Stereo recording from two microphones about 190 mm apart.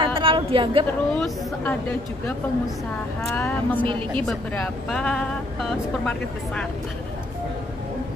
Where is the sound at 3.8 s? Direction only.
25° right (ahead or behind).